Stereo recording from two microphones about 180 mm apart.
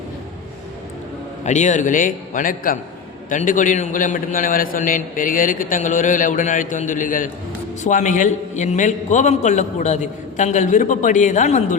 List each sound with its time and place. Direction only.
1.5 s a man's voice: 40° left (ahead or behind)